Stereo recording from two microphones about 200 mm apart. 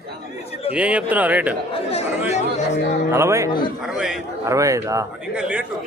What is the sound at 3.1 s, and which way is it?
Speech, 15° right (ahead or behind).